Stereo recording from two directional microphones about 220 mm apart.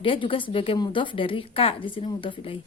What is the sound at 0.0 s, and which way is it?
A woman's voice, 25° left (ahead or behind).